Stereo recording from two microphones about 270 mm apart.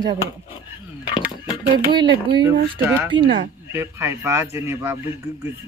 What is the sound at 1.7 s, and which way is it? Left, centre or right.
A man's voice, centre.